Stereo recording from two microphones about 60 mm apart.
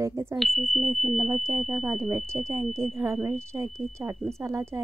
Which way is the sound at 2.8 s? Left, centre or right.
Right.